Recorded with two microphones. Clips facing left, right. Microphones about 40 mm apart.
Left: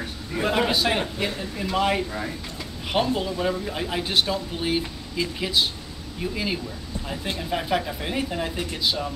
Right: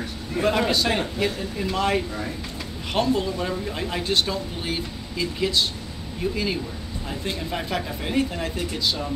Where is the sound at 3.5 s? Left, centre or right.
Centre.